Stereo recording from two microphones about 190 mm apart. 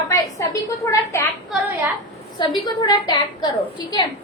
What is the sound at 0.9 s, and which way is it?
Speech, 15° left (ahead or behind).